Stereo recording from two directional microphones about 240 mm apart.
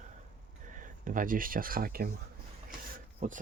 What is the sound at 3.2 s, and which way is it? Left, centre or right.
Speech, right.